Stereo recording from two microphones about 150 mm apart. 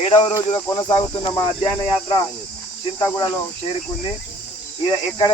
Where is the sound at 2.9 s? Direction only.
30° left (ahead or behind).